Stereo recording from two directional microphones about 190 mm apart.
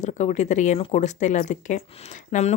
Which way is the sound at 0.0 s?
40° left (ahead or behind).